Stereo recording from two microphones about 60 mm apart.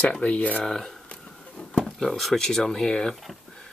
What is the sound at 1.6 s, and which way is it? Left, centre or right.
Speech, centre.